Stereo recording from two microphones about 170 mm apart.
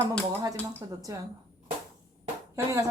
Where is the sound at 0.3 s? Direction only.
20° right (ahead or behind).